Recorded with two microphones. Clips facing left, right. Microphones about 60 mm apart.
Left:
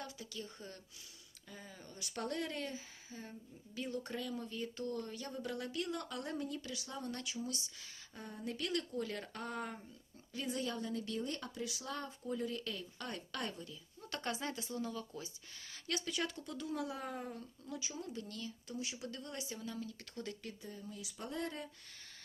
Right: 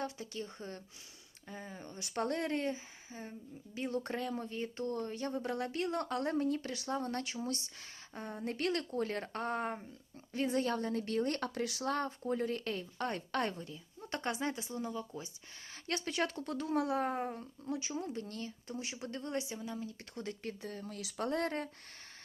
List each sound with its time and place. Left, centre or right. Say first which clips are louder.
0.0 s speech: right 6 dB; right
3.8 s speech: right 5 dB; right
15.7 s speech: right 3 dB; right
19.5 s speech: right 3 dB; right
20.6 s speech: right 5 dB; right